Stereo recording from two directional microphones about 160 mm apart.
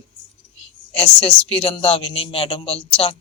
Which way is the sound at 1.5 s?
35° left (ahead or behind).